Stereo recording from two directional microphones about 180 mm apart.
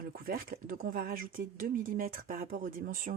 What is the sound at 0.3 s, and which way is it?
Speech, 50° right (ahead or behind).